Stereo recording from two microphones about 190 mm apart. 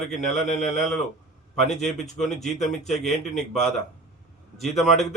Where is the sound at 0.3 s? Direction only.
40° left (ahead or behind).